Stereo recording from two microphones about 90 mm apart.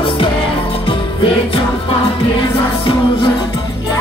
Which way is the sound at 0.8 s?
85° left.